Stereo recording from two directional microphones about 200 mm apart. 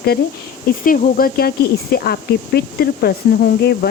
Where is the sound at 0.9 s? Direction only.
45° left (ahead or behind).